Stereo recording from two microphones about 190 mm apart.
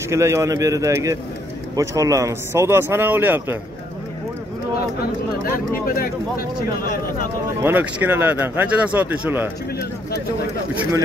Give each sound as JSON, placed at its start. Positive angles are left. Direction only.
{"t": 0.1, "sound": "speech", "side_deg": -15}
{"t": 5.4, "sound": "speech", "side_deg": 50}
{"t": 7.6, "sound": "speech", "side_deg": -10}
{"t": 10.7, "sound": "speech", "side_deg": -10}